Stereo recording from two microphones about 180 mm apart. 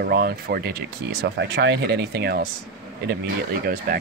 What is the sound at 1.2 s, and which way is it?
Speech, 75° right (ahead or behind).